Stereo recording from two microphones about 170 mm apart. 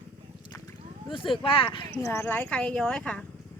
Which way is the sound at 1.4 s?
30° left (ahead or behind).